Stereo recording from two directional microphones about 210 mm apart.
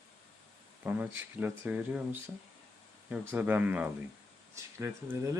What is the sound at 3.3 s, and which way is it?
Speech, 10° right (ahead or behind).